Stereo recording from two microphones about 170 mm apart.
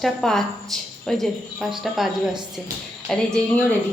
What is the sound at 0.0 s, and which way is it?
A woman's voice, centre (ahead or behind).